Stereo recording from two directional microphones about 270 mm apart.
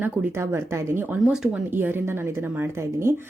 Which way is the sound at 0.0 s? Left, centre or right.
Centre.